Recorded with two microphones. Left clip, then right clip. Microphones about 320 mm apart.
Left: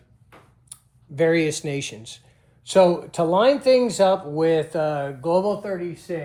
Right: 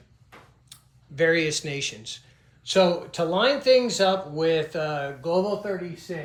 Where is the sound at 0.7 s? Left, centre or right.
Centre.